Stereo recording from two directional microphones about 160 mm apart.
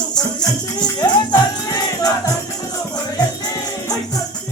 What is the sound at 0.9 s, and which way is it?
Speech, 25° left (ahead or behind).